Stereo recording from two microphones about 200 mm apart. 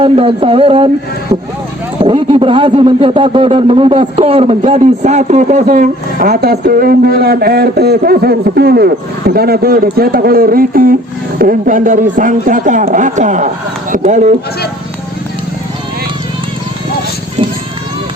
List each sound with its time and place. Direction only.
0.0 s speech: 25° right (ahead or behind)
2.0 s a man's voice: 25° right (ahead or behind)